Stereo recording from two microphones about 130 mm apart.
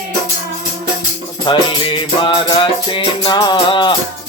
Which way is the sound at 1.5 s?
40° left (ahead or behind).